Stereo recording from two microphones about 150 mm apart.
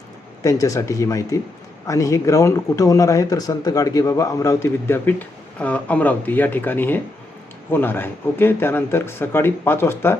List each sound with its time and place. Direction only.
0.4 s speech: 20° left (ahead or behind)